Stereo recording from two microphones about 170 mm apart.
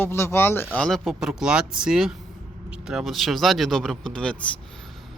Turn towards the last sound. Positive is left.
turn(degrees=5)  # may be behind; listen again after turning